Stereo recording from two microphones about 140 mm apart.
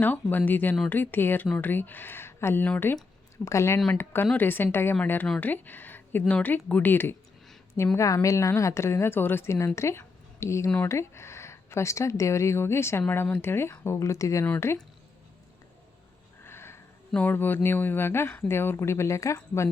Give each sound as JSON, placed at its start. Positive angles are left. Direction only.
{"t": 0.0, "sound": "speech", "side_deg": 15}
{"t": 3.4, "sound": "speech", "side_deg": 20}
{"t": 16.4, "sound": "a sound", "side_deg": 15}
{"t": 17.1, "sound": "speech", "side_deg": 10}